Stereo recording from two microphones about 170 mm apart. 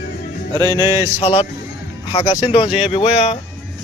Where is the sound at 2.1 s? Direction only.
25° left (ahead or behind).